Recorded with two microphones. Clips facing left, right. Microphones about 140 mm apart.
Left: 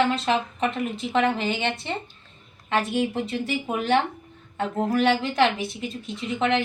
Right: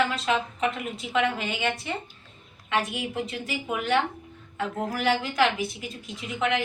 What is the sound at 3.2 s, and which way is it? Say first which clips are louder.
A woman's voice: left 4 dB; 30° left (ahead or behind).